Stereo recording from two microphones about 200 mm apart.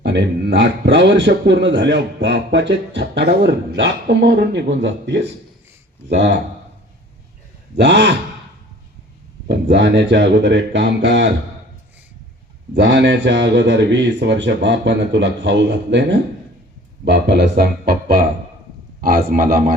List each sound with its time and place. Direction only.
0.0 s a man's voice: 60° right (ahead or behind)
7.8 s a man's voice: 60° right (ahead or behind)
9.5 s a man's voice: 60° right (ahead or behind)
12.7 s a man's voice: 60° right (ahead or behind); by 19.7 s 45° right (ahead or behind)